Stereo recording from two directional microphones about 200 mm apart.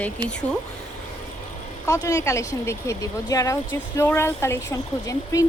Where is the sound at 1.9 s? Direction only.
15° left (ahead or behind).